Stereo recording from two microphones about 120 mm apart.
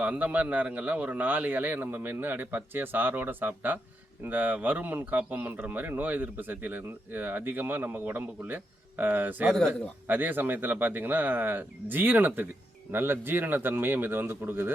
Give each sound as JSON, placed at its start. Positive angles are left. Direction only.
{"t": 0.0, "sound": "speech", "side_deg": -10}